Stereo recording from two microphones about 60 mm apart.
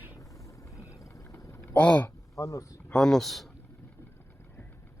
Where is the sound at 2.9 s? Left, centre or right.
Centre.